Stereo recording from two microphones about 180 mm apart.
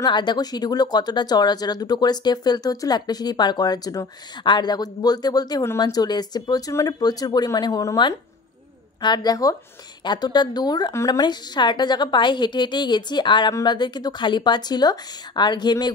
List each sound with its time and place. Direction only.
0.0 s speech: 25° left (ahead or behind)